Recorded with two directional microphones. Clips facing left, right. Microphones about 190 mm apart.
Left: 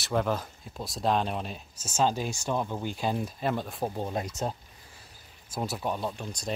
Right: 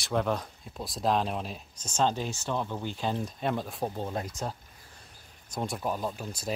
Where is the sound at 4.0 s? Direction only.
15° left (ahead or behind).